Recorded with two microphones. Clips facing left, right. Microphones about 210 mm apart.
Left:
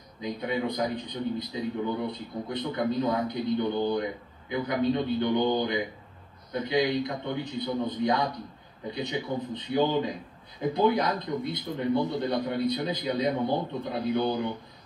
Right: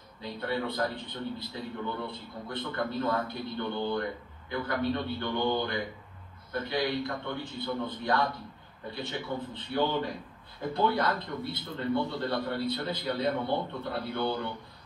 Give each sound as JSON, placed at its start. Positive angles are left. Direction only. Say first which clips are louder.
{"t": 0.2, "sound": "a man's voice", "louder": "left 3 dB", "side_deg": 15}